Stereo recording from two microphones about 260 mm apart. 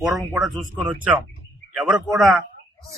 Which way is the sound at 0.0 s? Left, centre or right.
Centre.